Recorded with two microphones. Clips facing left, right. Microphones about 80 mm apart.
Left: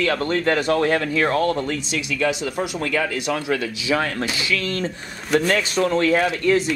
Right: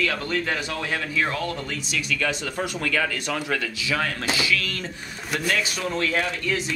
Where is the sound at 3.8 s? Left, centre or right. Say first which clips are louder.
Left 5 dB; left.